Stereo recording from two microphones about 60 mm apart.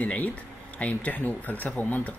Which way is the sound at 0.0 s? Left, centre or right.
Left.